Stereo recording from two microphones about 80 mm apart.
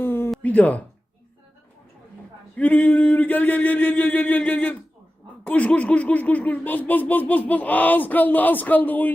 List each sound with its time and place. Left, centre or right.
0.0 s a sound: left
0.4 s speech: centre
2.6 s speech: centre